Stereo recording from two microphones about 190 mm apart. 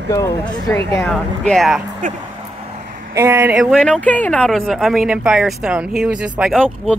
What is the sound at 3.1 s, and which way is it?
Speech, 15° right (ahead or behind).